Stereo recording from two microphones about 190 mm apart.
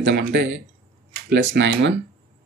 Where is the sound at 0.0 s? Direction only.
60° right (ahead or behind).